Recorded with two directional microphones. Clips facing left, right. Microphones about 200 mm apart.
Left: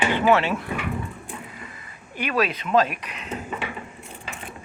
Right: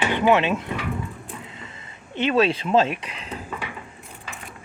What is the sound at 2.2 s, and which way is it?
Speech, 25° right (ahead or behind).